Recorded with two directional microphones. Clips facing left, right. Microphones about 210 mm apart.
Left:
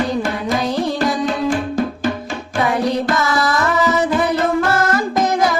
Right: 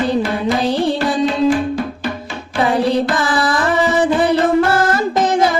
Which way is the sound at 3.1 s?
30° right (ahead or behind).